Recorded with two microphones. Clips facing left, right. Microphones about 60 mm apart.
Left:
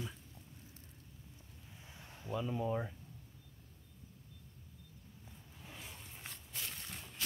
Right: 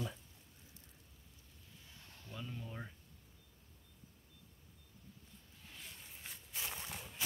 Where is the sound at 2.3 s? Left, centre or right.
Centre.